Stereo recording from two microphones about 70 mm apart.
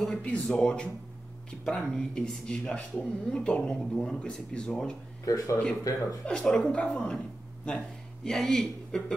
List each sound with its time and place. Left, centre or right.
0.1 s speech: centre
5.2 s speech: left
6.2 s speech: centre